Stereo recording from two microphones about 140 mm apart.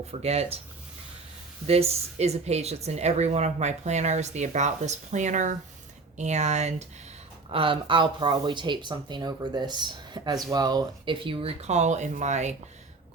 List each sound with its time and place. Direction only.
0.1 s speech: 50° right (ahead or behind)
1.6 s speech: 45° right (ahead or behind)
7.5 s speech: 40° right (ahead or behind); by 12.5 s 55° right (ahead or behind)